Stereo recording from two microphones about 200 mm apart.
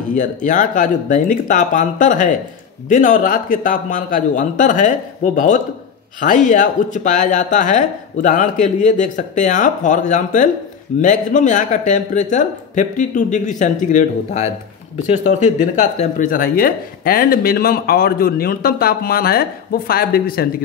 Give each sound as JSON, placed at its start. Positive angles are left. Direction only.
{"t": 0.1, "sound": "speech", "side_deg": 40}